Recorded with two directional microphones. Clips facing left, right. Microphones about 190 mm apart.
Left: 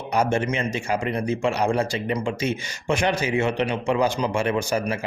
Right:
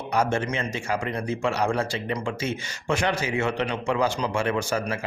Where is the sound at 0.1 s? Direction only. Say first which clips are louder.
Left 2 dB; 15° left (ahead or behind).